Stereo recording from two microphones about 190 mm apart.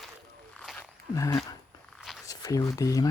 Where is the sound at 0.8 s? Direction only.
15° left (ahead or behind).